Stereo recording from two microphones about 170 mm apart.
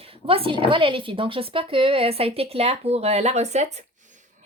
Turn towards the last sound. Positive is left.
turn(degrees=-40)  # may be behind; listen again after turning